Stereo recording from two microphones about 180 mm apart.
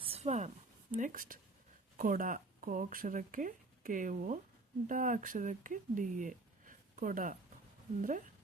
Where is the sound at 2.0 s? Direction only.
50° right (ahead or behind).